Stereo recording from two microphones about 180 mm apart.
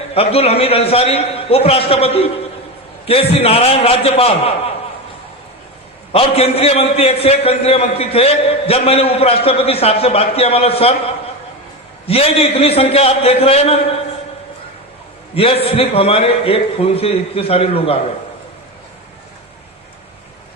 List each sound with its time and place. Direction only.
0.1 s a man's voice: 35° left (ahead or behind)
6.1 s a man's voice: 35° left (ahead or behind)
12.0 s a man's voice: 35° left (ahead or behind)
15.4 s a man's voice: 30° left (ahead or behind)